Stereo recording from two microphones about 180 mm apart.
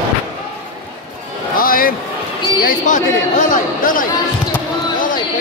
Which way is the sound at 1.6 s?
55° left (ahead or behind).